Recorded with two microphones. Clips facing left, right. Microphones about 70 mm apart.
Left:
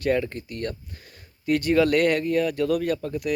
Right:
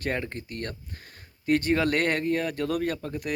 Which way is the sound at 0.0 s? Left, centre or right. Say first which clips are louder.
Left 7 dB; right.